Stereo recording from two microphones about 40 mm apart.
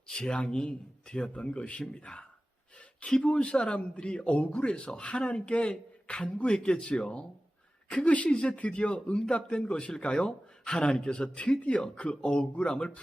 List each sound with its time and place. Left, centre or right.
0.1 s speech: left
2.1 s speech: centre
3.2 s a woman's voice: left